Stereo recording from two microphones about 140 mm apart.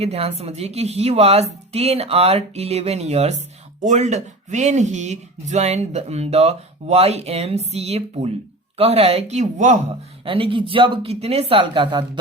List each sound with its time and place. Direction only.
0.0 s speech: 45° right (ahead or behind)
10.2 s speech: 40° right (ahead or behind)